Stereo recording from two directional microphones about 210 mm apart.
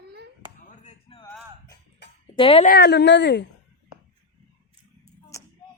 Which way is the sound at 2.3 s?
25° left (ahead or behind).